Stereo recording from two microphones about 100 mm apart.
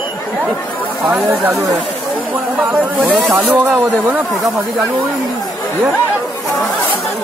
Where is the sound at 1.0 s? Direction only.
15° right (ahead or behind).